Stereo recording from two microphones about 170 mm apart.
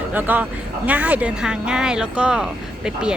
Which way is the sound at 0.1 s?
10° right (ahead or behind).